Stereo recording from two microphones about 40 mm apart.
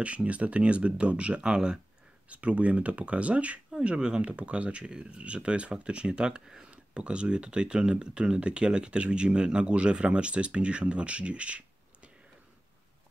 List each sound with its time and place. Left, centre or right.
0.0 s speech: right
2.2 s speech: right